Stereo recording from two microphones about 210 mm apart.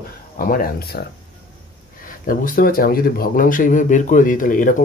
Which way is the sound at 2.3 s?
40° left (ahead or behind).